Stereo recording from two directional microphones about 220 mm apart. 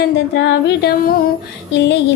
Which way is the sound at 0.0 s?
50° left (ahead or behind).